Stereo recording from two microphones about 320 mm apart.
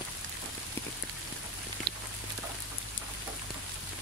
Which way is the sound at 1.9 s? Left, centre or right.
Right.